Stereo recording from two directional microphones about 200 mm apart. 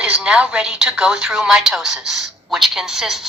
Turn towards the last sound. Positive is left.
turn(degrees=0)  # may be behind; listen again after turning